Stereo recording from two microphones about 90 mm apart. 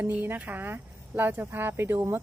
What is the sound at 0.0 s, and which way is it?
A woman's voice, 20° right (ahead or behind).